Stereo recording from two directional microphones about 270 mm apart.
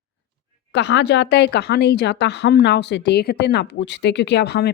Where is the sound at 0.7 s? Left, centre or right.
Left.